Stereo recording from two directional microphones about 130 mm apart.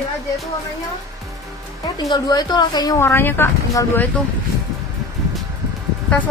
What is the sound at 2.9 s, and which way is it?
Speech, 20° left (ahead or behind).